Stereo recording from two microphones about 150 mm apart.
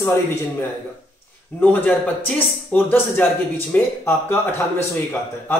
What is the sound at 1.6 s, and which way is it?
Speech, 10° left (ahead or behind).